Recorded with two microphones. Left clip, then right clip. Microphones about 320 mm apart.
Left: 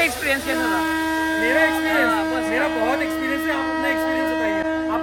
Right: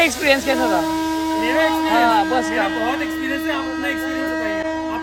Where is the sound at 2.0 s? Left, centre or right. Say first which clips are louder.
Right 5 dB; centre.